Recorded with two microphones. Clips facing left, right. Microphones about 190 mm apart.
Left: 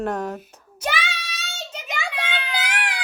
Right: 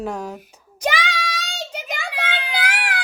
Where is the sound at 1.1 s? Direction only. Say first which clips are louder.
Right 10 dB; 90° right.